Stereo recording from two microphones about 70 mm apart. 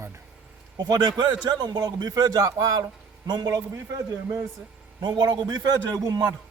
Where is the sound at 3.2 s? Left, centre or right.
Right.